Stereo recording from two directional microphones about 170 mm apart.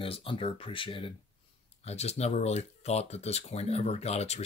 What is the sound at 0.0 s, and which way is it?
Speech, 30° left (ahead or behind).